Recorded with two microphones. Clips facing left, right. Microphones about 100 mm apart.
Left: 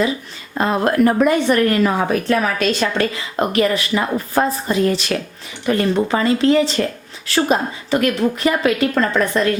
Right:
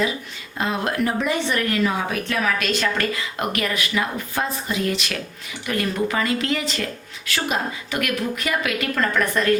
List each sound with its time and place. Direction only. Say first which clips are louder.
0.5 s speech: left 7 dB; 45° left (ahead or behind)
2.6 s a woman's voice: left 5 dB; 30° left (ahead or behind)